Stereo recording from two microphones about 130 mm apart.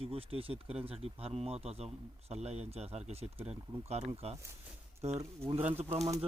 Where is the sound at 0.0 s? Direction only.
45° right (ahead or behind).